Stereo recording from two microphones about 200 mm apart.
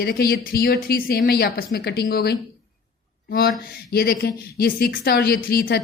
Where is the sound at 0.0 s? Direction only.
50° left (ahead or behind).